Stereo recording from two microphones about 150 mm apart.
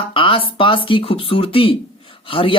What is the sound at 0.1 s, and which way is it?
Speech, 35° left (ahead or behind).